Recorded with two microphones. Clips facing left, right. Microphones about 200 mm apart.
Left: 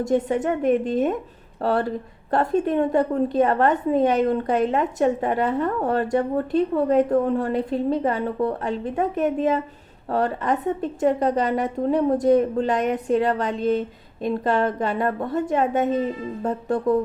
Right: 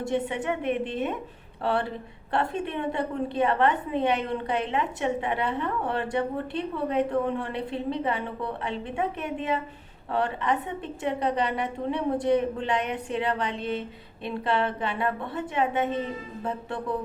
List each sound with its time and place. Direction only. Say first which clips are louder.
0.0 s a woman's voice: left 7 dB; 40° left (ahead or behind)